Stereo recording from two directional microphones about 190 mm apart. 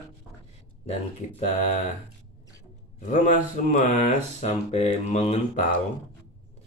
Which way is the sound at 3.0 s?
40° left (ahead or behind).